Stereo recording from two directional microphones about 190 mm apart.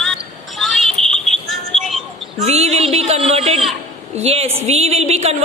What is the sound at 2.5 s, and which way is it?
A woman's voice, 35° right (ahead or behind).